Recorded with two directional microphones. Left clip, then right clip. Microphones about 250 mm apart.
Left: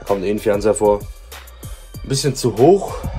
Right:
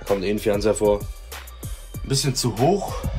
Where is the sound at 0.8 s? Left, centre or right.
Centre.